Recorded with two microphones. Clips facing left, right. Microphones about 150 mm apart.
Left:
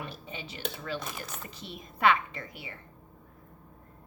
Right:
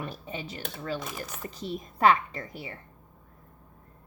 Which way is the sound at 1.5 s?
40° right (ahead or behind).